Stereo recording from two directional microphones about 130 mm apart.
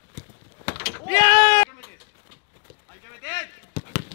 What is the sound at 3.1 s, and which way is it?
Chop, 20° left (ahead or behind).